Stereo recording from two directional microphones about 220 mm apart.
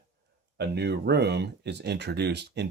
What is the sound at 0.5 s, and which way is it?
Speech, 50° right (ahead or behind).